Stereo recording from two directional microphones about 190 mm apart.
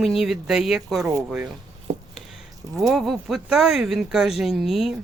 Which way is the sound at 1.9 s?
35° right (ahead or behind).